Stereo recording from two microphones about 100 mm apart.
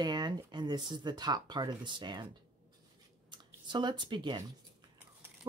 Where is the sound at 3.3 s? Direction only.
50° right (ahead or behind).